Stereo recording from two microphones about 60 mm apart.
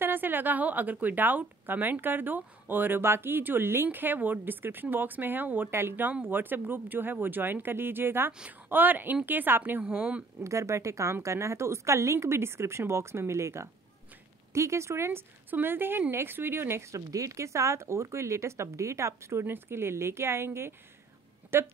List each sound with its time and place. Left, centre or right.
0.0 s a woman's voice: right
5.7 s a woman's voice: right
8.3 s speech: centre
8.6 s a woman's voice: right
10.4 s a woman's voice: right
19.4 s speech: right